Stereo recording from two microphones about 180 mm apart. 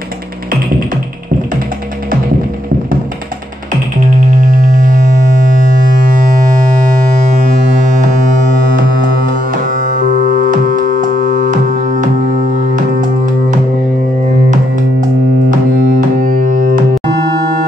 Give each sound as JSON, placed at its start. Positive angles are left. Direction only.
{"t": 4.4, "sound": "music", "side_deg": -45}
{"t": 7.2, "sound": "a sound", "side_deg": -45}
{"t": 9.5, "sound": "music", "side_deg": -50}
{"t": 15.5, "sound": "music", "side_deg": -50}